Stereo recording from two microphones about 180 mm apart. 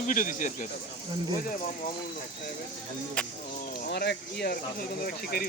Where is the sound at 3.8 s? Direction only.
60° left (ahead or behind).